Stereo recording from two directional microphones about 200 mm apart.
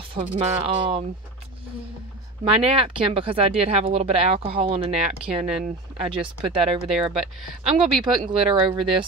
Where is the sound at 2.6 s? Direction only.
30° right (ahead or behind).